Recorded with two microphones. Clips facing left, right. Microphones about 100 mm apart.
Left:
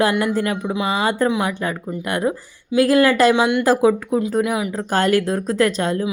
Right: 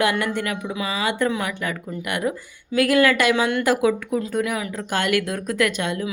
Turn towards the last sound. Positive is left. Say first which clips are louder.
# left 4 dB
turn(degrees=35)  # may be behind; listen again after turning